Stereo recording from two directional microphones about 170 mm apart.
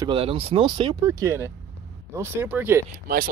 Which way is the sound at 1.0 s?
15° right (ahead or behind).